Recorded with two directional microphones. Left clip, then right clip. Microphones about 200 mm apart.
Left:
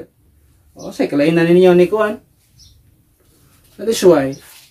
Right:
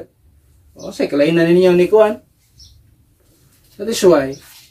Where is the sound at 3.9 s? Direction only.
15° left (ahead or behind).